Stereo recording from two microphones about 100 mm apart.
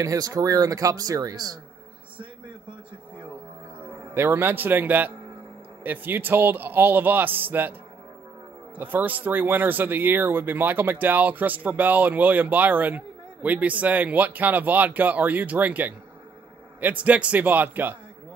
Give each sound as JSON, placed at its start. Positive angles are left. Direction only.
{"t": 0.0, "sound": "speech", "side_deg": -35}
{"t": 4.1, "sound": "a man's voice", "side_deg": -20}
{"t": 8.7, "sound": "speech", "side_deg": -20}